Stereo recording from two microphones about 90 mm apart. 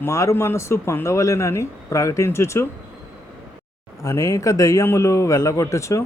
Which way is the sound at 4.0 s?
35° left (ahead or behind).